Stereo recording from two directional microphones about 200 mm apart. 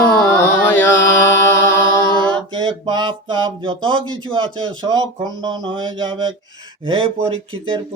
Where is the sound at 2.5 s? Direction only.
20° right (ahead or behind).